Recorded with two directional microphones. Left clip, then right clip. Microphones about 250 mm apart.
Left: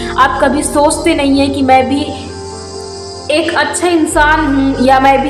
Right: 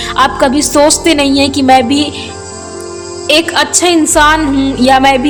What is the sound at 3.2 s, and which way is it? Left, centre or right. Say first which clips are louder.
A woman's voice: right 2 dB; right.